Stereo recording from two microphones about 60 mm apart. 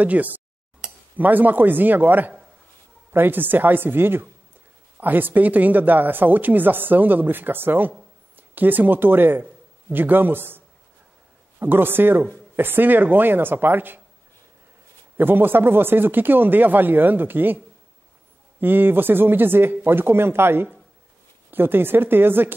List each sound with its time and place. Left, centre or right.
0.0 s speech: right
11.6 s speech: right
15.1 s speech: right
18.6 s speech: right